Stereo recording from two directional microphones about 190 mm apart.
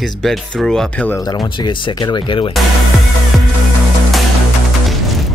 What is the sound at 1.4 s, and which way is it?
Speech, 25° left (ahead or behind).